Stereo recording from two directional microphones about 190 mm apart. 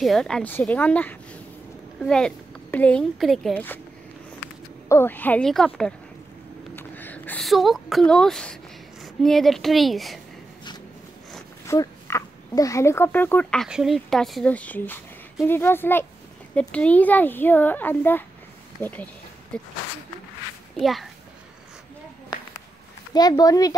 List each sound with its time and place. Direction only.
0.0 s speech: centre (ahead or behind)
4.8 s a woman's voice: 10° left (ahead or behind)
11.6 s a woman's voice: 15° left (ahead or behind)
20.7 s a woman's voice: centre (ahead or behind)
23.1 s speech: 20° left (ahead or behind)